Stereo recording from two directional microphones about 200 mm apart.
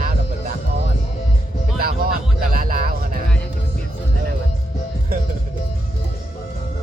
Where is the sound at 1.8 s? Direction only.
45° right (ahead or behind).